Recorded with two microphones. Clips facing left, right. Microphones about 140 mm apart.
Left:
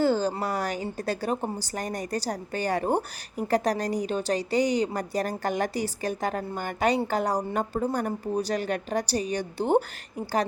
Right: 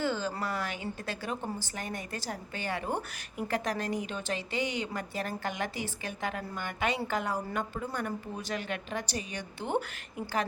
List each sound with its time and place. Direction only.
0.0 s a woman's voice: 40° left (ahead or behind)